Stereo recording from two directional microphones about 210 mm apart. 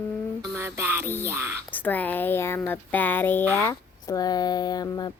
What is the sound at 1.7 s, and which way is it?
Speech, 10° left (ahead or behind).